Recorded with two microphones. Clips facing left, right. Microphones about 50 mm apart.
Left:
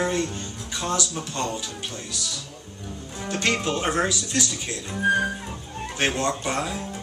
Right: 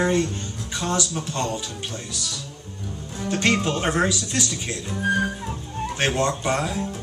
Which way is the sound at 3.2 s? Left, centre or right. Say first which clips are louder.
Right 3 dB; centre.